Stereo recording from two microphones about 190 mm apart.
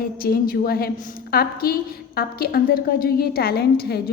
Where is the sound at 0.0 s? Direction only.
50° left (ahead or behind).